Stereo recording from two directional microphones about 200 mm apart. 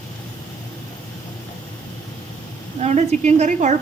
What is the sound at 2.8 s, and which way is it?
Speech, 35° right (ahead or behind).